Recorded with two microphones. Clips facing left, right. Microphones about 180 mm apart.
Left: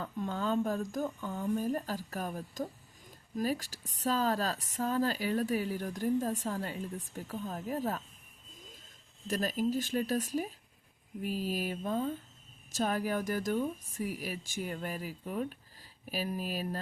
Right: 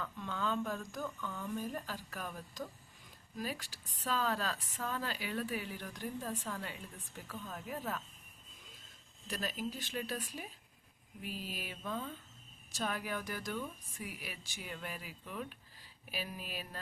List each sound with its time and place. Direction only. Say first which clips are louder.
0.0 s speech: left 5 dB; 40° left (ahead or behind)
9.2 s speech: left 8 dB; 45° left (ahead or behind)